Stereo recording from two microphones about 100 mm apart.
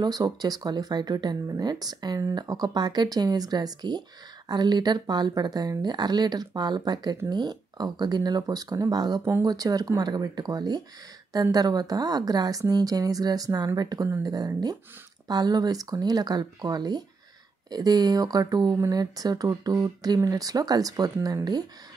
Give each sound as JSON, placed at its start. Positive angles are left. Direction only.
{"t": 0.0, "sound": "speech", "side_deg": -40}